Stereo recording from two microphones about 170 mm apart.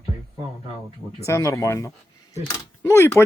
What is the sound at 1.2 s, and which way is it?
Speech, 15° left (ahead or behind).